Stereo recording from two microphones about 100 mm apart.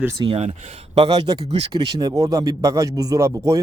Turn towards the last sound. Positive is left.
turn(degrees=-30)  # may be behind; listen again after turning